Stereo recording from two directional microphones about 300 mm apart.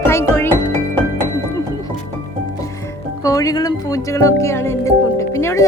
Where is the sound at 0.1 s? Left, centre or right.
Centre.